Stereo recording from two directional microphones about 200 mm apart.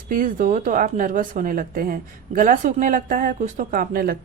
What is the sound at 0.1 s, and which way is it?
Speech, 45° right (ahead or behind).